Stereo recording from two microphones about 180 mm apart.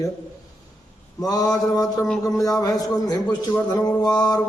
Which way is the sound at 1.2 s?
20° left (ahead or behind).